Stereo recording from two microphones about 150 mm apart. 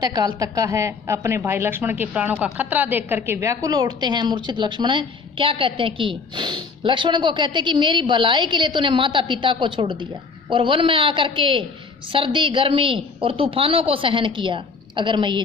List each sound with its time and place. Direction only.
0.0 s a woman's voice: 25° right (ahead or behind)